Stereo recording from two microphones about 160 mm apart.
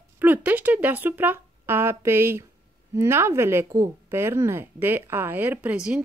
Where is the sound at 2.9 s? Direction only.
15° right (ahead or behind).